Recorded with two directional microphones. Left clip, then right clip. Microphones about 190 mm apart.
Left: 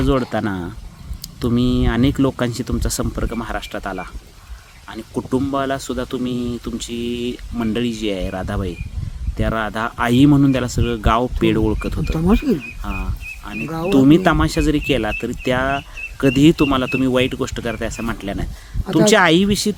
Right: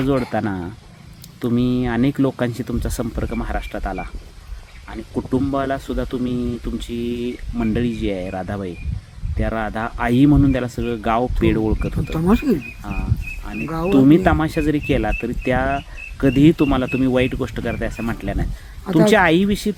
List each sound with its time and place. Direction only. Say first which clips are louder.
0.0 s speech: left 1 dB; centre (ahead or behind)